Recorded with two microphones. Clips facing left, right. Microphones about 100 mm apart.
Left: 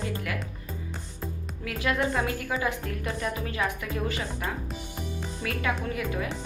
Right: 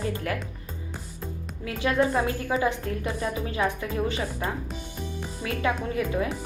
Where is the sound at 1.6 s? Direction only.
30° right (ahead or behind).